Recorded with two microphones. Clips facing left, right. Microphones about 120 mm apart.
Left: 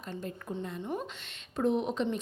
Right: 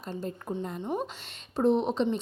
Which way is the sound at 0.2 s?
30° right (ahead or behind).